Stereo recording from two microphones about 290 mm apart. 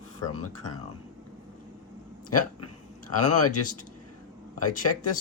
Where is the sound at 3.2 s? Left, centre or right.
Left.